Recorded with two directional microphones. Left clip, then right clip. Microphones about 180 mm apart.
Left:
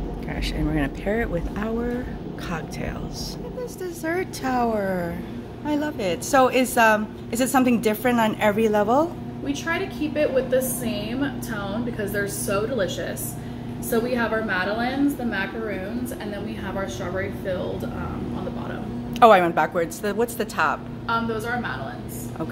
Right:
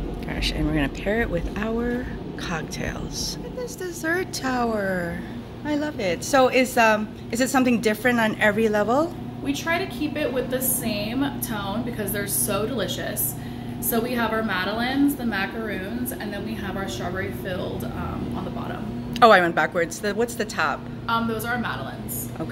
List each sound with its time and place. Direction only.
0.4 s a woman's voice: centre (ahead or behind)
3.8 s a woman's voice: centre (ahead or behind)
9.5 s a woman's voice: 60° right (ahead or behind)
12.0 s a woman's voice: 60° right (ahead or behind)
19.1 s a woman's voice: 5° left (ahead or behind)
21.1 s a woman's voice: 60° right (ahead or behind)